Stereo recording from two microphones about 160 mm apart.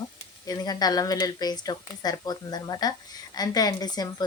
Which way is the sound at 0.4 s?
25° left (ahead or behind).